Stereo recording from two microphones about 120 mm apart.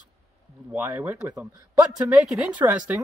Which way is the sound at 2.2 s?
10° right (ahead or behind).